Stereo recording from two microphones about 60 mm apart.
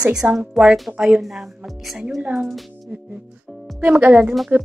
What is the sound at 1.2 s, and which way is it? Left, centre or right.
Speech, centre.